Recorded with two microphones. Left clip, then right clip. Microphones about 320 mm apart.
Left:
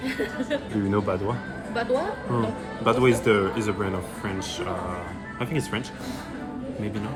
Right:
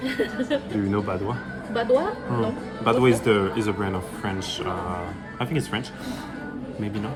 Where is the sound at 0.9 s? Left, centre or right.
Centre.